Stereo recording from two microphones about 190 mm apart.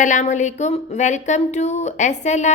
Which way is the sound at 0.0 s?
40° left (ahead or behind).